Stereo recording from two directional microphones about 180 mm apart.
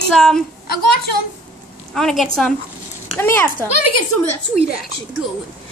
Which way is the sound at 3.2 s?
15° left (ahead or behind).